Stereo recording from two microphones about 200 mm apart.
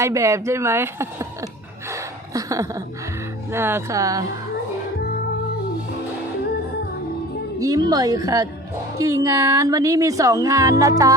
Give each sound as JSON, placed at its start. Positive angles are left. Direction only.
{"t": 0.0, "sound": "speech", "side_deg": -15}
{"t": 1.9, "sound": "gasp", "side_deg": -15}
{"t": 3.5, "sound": "speech", "side_deg": -10}
{"t": 7.6, "sound": "speech", "side_deg": -20}